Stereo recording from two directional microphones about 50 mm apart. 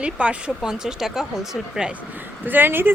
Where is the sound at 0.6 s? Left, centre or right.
Centre.